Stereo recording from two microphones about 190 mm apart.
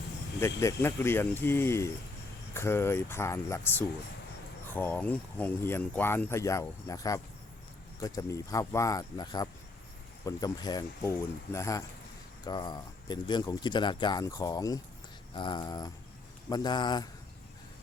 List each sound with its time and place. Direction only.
0.3 s speech: 15° left (ahead or behind)